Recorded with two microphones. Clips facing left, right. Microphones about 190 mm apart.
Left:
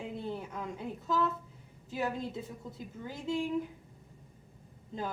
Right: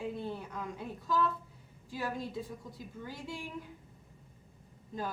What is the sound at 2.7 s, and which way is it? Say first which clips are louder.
Speech: left 2 dB; 20° left (ahead or behind).